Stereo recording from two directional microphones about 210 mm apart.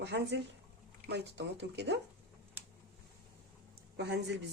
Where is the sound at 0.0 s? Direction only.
55° right (ahead or behind).